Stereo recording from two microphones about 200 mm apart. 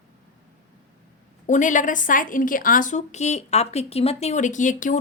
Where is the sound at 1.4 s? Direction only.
40° left (ahead or behind).